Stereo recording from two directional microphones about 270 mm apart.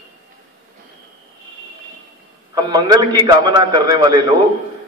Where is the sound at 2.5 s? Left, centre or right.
Centre.